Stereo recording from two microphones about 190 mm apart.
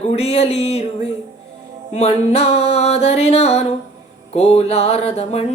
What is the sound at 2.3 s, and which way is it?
Speech, 35° left (ahead or behind).